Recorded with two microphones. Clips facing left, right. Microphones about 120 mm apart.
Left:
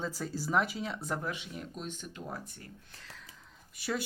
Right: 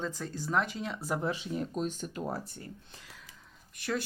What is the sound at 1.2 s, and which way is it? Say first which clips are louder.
Speech: right 6 dB; 35° right (ahead or behind).